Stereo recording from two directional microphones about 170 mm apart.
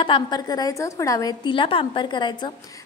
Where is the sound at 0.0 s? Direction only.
25° left (ahead or behind).